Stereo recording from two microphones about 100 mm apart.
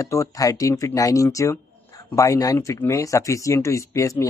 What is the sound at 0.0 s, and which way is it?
Speech, 35° left (ahead or behind).